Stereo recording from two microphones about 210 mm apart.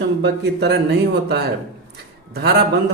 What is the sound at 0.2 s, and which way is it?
Speech, 50° right (ahead or behind).